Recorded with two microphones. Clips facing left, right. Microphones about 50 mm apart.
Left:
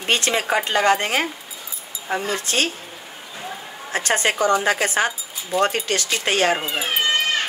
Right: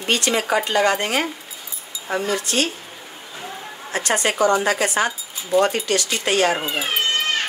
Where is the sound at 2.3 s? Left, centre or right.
Left.